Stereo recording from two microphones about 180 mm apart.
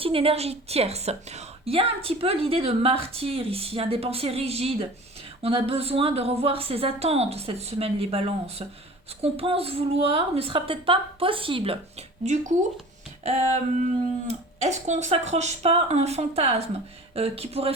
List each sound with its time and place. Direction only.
0.0 s a woman's voice: 30° right (ahead or behind)